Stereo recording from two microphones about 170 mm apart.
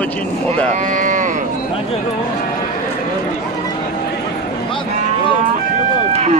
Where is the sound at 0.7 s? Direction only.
50° right (ahead or behind).